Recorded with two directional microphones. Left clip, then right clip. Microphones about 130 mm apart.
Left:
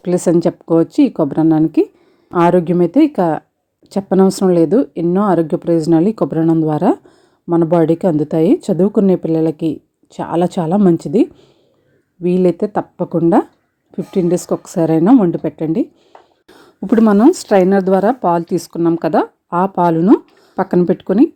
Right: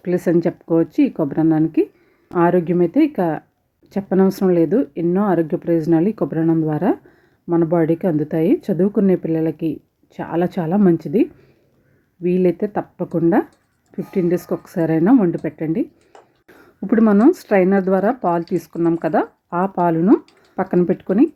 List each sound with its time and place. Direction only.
0.0 s speech: 35° left (ahead or behind)
16.5 s a sound: 30° left (ahead or behind)
17.0 s speech: 25° left (ahead or behind)